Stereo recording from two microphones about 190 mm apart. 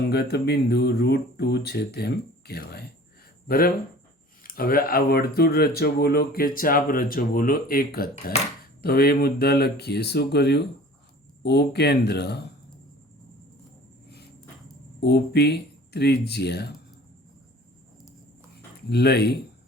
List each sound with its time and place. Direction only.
0.1 s speech: 60° left (ahead or behind)
15.0 s speech: 60° left (ahead or behind)
18.9 s speech: 60° left (ahead or behind)